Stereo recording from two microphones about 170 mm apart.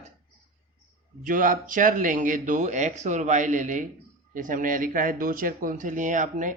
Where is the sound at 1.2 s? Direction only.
50° right (ahead or behind).